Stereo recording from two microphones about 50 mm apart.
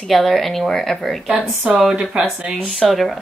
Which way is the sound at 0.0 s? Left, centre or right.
Centre.